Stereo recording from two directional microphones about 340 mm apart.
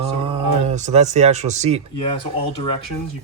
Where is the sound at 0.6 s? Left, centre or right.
Right.